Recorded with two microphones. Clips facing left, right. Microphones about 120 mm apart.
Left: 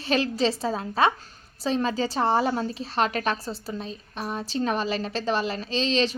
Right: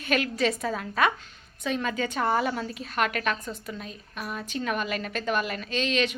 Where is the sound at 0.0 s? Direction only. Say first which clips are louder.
Left 2 dB; 30° left (ahead or behind).